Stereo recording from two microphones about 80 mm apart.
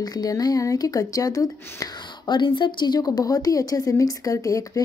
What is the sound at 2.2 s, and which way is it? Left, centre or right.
A woman's voice, left.